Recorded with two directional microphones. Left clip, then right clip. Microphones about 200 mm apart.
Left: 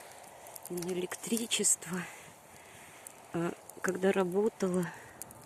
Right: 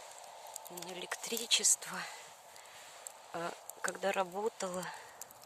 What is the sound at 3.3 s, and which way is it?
Speech, centre (ahead or behind).